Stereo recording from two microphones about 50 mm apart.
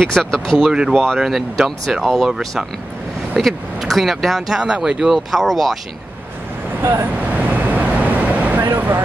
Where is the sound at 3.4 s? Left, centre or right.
Centre.